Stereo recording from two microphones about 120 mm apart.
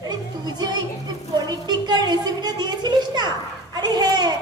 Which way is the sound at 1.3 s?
35° right (ahead or behind).